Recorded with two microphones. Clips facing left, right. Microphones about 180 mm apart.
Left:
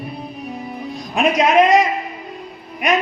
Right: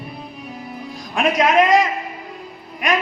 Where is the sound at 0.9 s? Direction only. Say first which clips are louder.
Left 2 dB; 25° left (ahead or behind).